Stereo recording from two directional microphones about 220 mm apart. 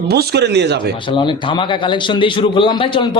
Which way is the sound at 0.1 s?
50° right (ahead or behind).